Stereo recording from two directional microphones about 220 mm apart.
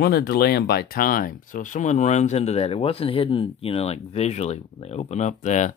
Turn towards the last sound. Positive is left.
turn(degrees=35)  # may be behind; listen again after turning